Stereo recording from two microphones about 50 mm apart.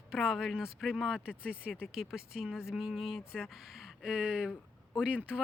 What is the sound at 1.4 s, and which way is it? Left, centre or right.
Speech, right.